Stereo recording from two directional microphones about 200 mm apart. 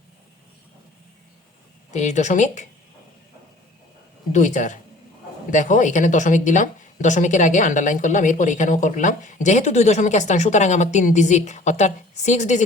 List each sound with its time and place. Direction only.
1.9 s speech: 35° left (ahead or behind)
4.3 s speech: 40° left (ahead or behind)